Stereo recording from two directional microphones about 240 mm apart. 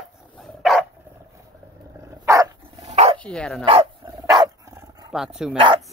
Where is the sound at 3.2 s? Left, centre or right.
Centre.